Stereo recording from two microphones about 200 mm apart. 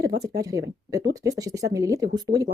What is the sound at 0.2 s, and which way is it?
Speech, 15° right (ahead or behind).